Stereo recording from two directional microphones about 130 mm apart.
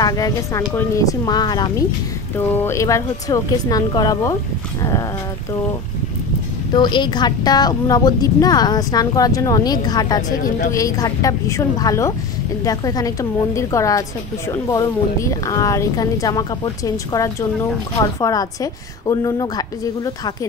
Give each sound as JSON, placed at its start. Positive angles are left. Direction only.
{"t": 0.0, "sound": "a woman's voice", "side_deg": 30}
{"t": 2.3, "sound": "a woman's voice", "side_deg": 20}
{"t": 6.7, "sound": "a woman's voice", "side_deg": 35}
{"t": 10.3, "sound": "a woman's voice", "side_deg": 90}
{"t": 10.7, "sound": "a woman's voice", "side_deg": 25}